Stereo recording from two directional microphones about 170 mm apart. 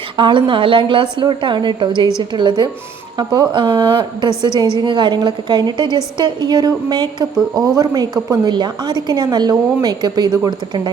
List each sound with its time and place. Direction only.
0.2 s a woman's voice: 30° right (ahead or behind)